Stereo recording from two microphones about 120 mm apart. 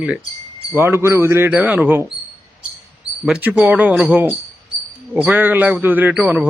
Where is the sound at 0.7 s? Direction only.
20° right (ahead or behind).